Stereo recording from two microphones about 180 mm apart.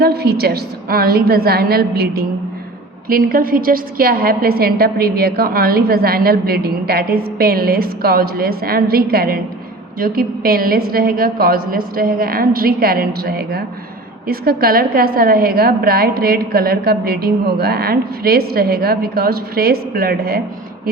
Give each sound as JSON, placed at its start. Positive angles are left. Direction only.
{"t": 0.0, "sound": "a woman's voice", "side_deg": -60}